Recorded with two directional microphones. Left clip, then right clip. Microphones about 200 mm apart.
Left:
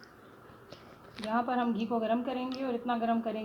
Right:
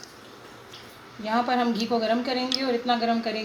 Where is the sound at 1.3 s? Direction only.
10° right (ahead or behind).